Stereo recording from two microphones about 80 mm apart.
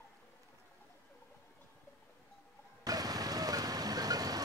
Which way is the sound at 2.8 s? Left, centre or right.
Right.